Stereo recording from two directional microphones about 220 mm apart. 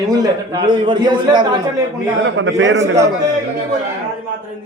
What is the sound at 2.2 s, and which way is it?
Speech, 60° right (ahead or behind).